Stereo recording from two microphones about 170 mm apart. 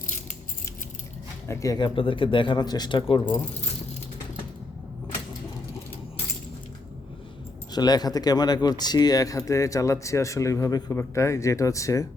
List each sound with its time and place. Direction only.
1.5 s speech: 20° left (ahead or behind)
7.7 s speech: 25° left (ahead or behind)